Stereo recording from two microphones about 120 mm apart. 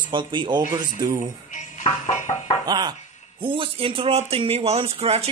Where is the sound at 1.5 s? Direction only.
90° left.